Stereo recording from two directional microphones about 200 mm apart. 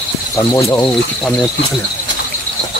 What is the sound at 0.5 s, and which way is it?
Speech, 15° left (ahead or behind).